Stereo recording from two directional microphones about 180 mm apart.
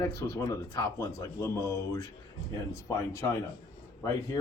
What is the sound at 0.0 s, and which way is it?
Speech, 15° left (ahead or behind).